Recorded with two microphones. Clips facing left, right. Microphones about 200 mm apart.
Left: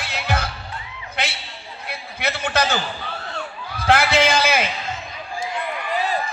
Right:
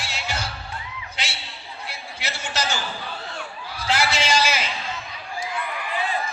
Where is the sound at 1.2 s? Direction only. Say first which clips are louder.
Left 8 dB; 55° left (ahead or behind).